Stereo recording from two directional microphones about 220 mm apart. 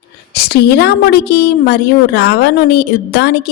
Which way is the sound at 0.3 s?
45° left (ahead or behind).